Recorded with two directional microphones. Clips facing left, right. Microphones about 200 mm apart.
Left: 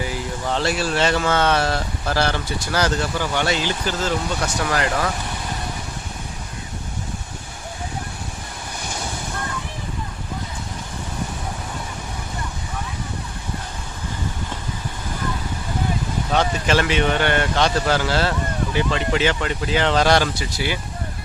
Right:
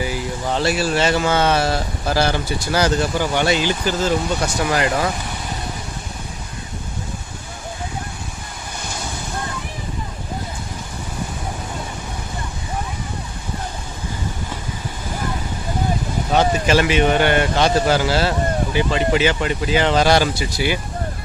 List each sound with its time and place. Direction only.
0.0 s speech: 10° right (ahead or behind)
16.3 s speech: 5° right (ahead or behind)